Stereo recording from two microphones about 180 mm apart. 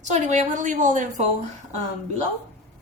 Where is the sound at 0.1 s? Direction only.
40° right (ahead or behind).